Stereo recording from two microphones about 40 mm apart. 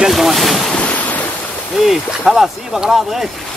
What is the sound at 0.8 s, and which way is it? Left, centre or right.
Waves, left.